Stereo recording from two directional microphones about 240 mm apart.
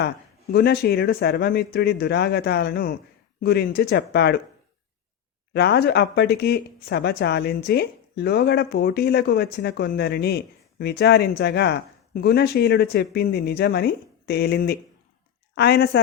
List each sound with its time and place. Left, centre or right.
0.5 s speech: left
5.5 s speech: left